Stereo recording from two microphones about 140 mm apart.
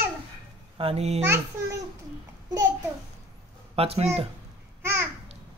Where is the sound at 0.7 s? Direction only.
45° right (ahead or behind).